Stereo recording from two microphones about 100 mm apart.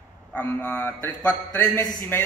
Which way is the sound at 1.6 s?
40° left (ahead or behind).